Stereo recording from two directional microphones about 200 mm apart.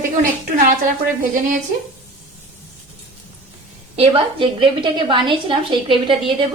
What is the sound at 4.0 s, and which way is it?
A woman's voice, 25° right (ahead or behind).